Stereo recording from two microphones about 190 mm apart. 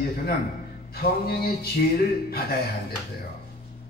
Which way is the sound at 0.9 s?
55° left (ahead or behind).